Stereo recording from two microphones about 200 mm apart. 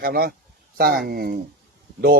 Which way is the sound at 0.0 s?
50° right (ahead or behind).